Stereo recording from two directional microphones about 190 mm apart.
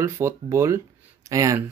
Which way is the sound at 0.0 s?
15° right (ahead or behind).